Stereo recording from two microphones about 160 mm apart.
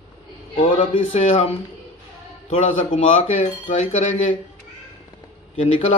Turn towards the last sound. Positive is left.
turn(degrees=35)  # may be behind; listen again after turning